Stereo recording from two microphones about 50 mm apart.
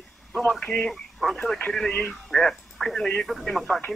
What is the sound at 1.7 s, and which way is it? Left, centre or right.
Speech, centre.